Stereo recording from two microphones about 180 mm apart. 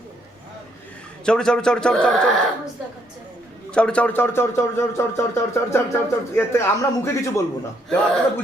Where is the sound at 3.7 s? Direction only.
5° left (ahead or behind).